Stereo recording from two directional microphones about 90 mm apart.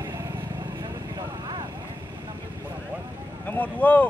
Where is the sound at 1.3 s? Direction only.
60° right (ahead or behind).